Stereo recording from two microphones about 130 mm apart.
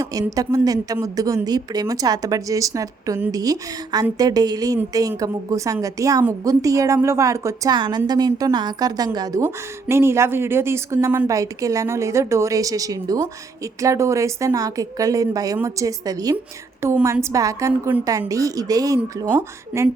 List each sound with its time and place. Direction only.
0.0 s a woman's voice: 25° right (ahead or behind)